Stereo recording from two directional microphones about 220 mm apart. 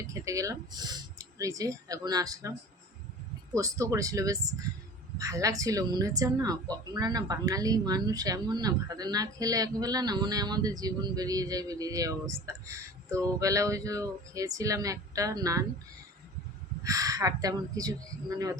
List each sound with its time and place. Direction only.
0.1 s a woman's voice: 15° right (ahead or behind)
16.8 s a woman's voice: 15° right (ahead or behind)